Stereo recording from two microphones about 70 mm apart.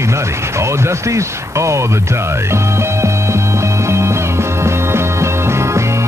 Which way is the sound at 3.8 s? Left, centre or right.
Right.